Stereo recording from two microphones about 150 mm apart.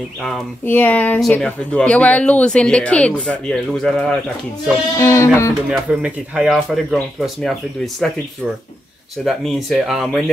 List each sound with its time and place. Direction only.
0.7 s speech: 10° left (ahead or behind)
4.9 s speech: 20° left (ahead or behind)
5.7 s speech: 10° right (ahead or behind)
9.2 s speech: centre (ahead or behind)